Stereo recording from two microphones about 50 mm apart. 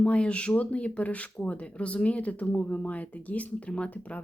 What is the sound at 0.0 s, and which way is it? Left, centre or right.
Speech, left.